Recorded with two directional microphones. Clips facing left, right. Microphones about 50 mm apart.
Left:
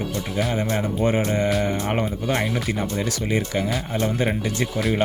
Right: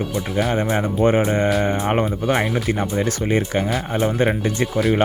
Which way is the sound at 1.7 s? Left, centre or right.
Right.